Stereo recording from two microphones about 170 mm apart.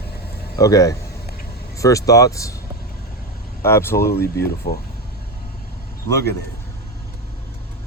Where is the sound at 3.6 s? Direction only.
15° left (ahead or behind).